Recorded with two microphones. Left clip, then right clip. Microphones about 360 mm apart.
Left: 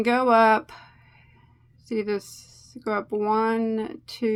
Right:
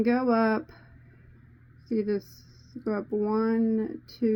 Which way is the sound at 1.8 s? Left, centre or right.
Centre.